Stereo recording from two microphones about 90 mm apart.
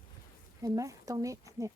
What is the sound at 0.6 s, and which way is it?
Speech, 40° right (ahead or behind).